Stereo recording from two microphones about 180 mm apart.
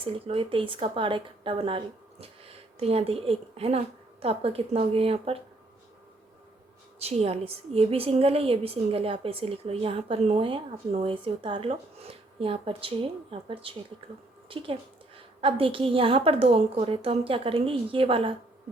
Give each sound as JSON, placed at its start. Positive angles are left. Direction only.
{"t": 0.0, "sound": "speech", "side_deg": -30}
{"t": 7.0, "sound": "a woman's voice", "side_deg": -35}